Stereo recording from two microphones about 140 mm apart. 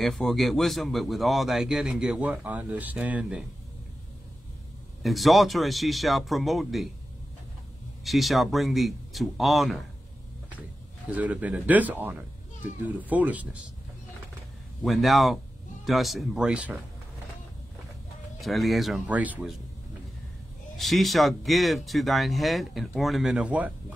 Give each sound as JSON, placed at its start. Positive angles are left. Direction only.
{"t": 0.0, "sound": "speech", "side_deg": 0}
{"t": 5.0, "sound": "speech", "side_deg": 0}
{"t": 8.0, "sound": "speech", "side_deg": 0}
{"t": 11.1, "sound": "speech", "side_deg": -10}
{"t": 14.8, "sound": "speech", "side_deg": 0}
{"t": 18.4, "sound": "speech", "side_deg": 0}
{"t": 19.0, "sound": "speech", "side_deg": -10}
{"t": 20.7, "sound": "speech", "side_deg": 0}